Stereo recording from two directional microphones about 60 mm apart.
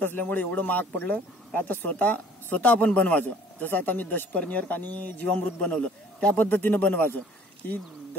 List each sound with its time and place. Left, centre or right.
0.0 s a man's voice: left; by 6.3 s centre
6.3 s a man's voice: left